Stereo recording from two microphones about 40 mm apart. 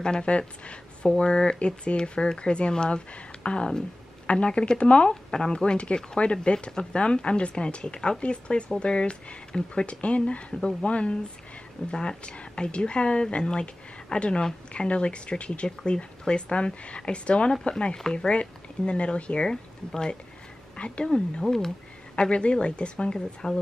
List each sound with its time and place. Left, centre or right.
0.0 s a woman's voice: left
5.3 s a woman's voice: centre
21.5 s speech: centre
22.1 s a woman's voice: left